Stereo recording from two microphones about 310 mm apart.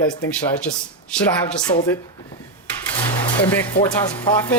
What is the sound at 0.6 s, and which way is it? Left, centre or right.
Speech, centre.